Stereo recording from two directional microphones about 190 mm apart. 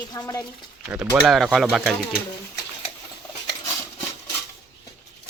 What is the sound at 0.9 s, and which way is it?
Speech, 10° right (ahead or behind).